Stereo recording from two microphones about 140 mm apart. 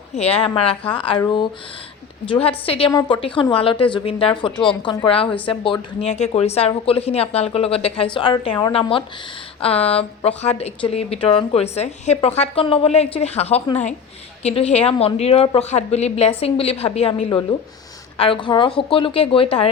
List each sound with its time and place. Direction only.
0.1 s a woman's voice: 50° left (ahead or behind)
2.2 s a woman's voice: 40° left (ahead or behind)
6.1 s a woman's voice: 55° left (ahead or behind)